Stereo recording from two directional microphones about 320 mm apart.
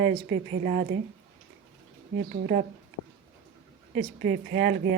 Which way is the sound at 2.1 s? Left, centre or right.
Right.